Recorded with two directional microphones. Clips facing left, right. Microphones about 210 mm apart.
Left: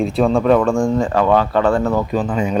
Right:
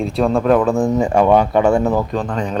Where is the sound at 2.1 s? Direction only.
5° left (ahead or behind).